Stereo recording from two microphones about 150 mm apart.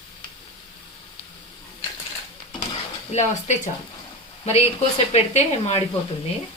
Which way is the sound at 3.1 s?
50° left (ahead or behind).